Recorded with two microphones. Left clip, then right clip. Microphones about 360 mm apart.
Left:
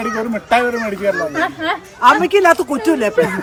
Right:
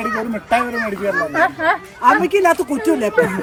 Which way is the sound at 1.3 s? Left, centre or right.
Centre.